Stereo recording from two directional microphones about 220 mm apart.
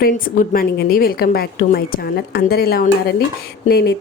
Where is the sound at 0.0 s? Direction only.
40° left (ahead or behind).